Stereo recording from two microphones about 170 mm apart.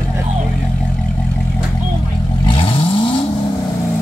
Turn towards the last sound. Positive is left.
turn(degrees=35)  # may be behind; listen again after turning